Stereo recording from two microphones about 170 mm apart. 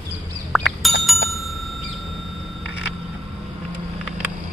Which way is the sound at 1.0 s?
Centre (ahead or behind).